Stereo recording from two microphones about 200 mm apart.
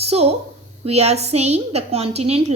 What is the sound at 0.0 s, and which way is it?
A woman's voice, 30° right (ahead or behind).